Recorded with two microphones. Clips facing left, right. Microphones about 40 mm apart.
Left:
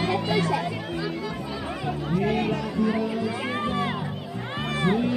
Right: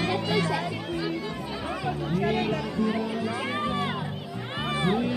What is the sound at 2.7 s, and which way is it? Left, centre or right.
Speech, centre.